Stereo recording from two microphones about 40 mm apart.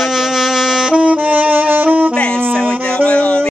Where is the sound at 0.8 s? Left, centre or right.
Right.